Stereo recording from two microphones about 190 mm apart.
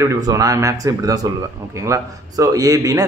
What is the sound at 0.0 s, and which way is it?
A man's voice, 15° right (ahead or behind).